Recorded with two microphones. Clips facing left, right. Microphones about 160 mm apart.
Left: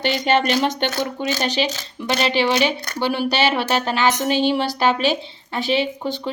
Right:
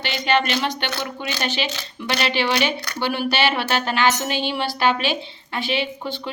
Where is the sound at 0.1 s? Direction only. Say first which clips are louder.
Left 1 dB; 40° left (ahead or behind).